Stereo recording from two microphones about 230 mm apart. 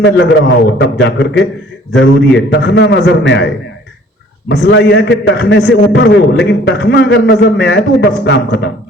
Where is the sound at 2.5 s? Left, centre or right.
Left.